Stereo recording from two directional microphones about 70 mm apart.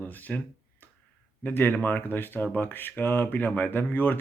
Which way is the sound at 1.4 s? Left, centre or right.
Left.